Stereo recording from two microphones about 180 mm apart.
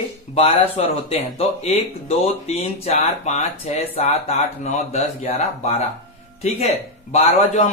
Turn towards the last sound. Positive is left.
turn(degrees=40)  # may be behind; listen again after turning